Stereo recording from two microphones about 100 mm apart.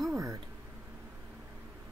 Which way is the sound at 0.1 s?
30° right (ahead or behind).